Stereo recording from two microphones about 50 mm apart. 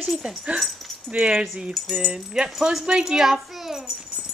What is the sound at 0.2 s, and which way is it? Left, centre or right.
Speech, centre.